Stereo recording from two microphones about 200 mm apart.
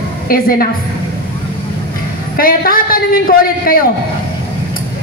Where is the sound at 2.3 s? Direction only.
45° left (ahead or behind).